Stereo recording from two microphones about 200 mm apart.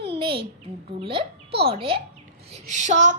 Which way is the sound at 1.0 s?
25° right (ahead or behind).